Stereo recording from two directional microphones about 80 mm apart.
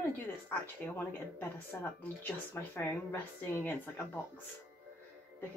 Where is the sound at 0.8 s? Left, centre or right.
Centre.